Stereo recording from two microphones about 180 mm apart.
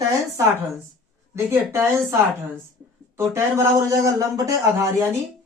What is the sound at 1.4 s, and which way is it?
Speech, 15° right (ahead or behind).